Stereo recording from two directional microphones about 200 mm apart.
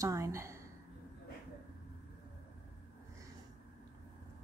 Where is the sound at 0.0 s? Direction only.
15° right (ahead or behind).